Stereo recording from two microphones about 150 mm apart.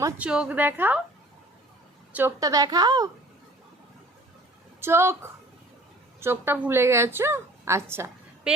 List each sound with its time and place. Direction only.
0.2 s a woman's voice: 10° right (ahead or behind)
2.4 s a woman's voice: 25° right (ahead or behind)
4.8 s a woman's voice: 15° right (ahead or behind)
6.1 s a woman's voice: 15° right (ahead or behind)